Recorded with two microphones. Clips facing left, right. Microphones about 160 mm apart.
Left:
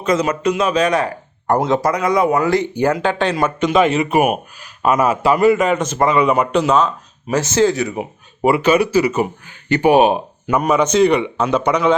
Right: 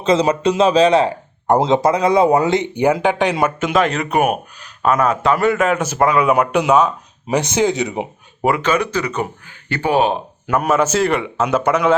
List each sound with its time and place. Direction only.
0.0 s a man's voice: 30° right (ahead or behind)
3.4 s a man's voice: 5° right (ahead or behind); by 8.0 s 20° right (ahead or behind)
8.4 s speech: 5° left (ahead or behind)
10.4 s a man's voice: 5° right (ahead or behind)